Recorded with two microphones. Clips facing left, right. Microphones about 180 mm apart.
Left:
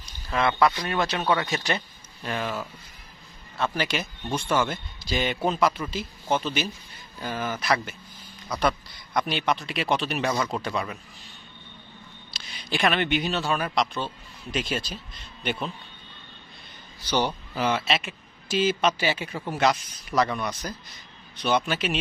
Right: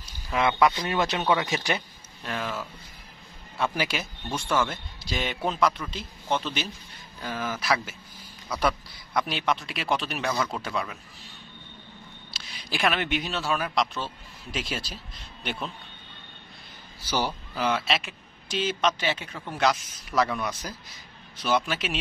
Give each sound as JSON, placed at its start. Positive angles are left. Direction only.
{"t": 0.0, "sound": "speech", "side_deg": -15}
{"t": 2.2, "sound": "speech", "side_deg": 0}
{"t": 3.5, "sound": "speech", "side_deg": -10}
{"t": 12.3, "sound": "speech", "side_deg": -5}
{"t": 17.0, "sound": "speech", "side_deg": -5}